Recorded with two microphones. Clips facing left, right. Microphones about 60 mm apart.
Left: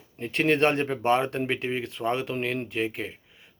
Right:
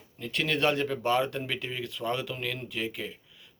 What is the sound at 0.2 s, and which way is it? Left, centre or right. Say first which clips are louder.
A man's voice: left 6 dB; left.